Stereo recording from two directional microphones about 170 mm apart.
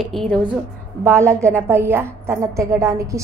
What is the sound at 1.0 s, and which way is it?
A woman's voice, 15° right (ahead or behind).